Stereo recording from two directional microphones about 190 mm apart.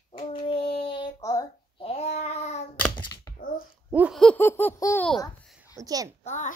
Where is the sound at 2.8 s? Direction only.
10° left (ahead or behind).